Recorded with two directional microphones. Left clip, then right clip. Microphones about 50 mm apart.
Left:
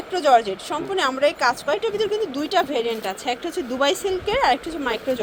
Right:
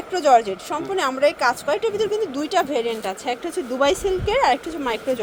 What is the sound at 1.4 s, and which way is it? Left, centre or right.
Speech, right.